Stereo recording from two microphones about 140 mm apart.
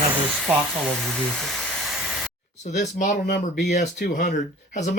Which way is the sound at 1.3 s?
5° left (ahead or behind).